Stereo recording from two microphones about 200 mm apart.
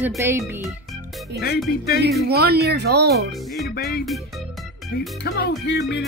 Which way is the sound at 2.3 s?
55° right (ahead or behind).